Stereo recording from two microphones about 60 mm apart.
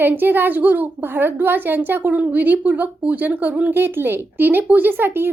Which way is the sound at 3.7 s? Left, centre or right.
Right.